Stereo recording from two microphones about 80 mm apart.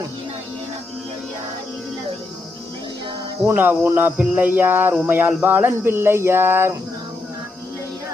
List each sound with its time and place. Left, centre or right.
3.4 s cricket: right